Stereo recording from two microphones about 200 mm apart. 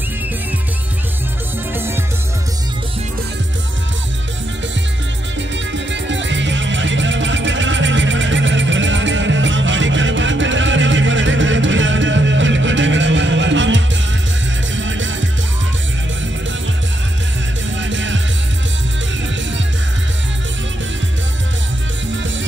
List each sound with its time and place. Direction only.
5.7 s music: 65° right (ahead or behind)
17.7 s music: 70° right (ahead or behind)